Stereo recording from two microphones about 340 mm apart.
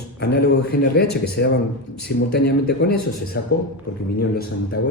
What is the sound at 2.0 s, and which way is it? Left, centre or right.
A man's voice, left.